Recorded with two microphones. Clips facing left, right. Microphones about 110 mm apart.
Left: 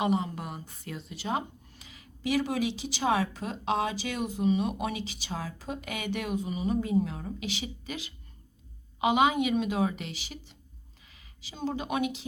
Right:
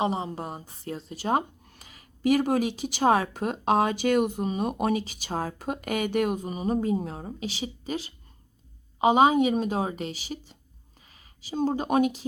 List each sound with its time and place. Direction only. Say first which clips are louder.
0.0 s a woman's voice: right 1 dB; 30° right (ahead or behind)